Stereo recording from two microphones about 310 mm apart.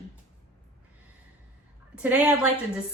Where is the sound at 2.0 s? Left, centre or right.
Centre.